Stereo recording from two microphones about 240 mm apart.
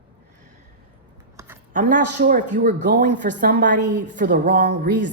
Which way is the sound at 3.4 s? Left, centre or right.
Right.